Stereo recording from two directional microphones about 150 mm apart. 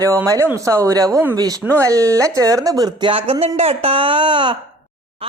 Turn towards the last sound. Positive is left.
turn(degrees=-30)  # may be behind; listen again after turning